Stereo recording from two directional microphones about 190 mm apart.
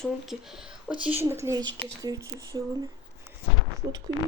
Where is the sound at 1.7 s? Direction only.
70° right (ahead or behind).